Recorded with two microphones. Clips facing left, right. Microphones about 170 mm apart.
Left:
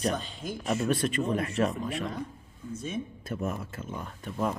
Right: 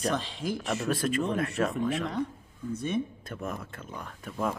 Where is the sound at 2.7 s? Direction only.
65° right (ahead or behind).